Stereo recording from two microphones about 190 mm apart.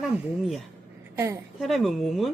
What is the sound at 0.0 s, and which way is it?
Speech, centre (ahead or behind).